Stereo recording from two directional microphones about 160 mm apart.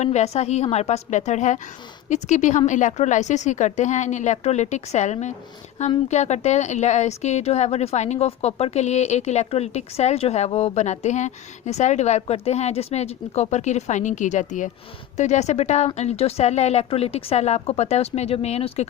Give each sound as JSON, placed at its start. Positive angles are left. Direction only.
{"t": 0.0, "sound": "a woman's voice", "side_deg": 45}